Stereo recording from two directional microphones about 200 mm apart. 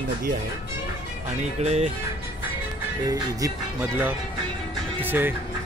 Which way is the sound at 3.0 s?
15° right (ahead or behind).